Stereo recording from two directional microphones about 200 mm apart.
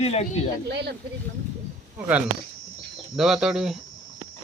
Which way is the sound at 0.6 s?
55° right (ahead or behind).